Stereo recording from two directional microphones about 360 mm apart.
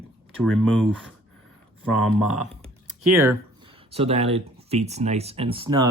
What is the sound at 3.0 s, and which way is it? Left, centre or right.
Speech, right.